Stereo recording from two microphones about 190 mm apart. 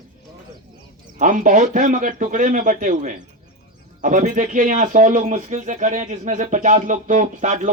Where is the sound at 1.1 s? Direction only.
40° right (ahead or behind).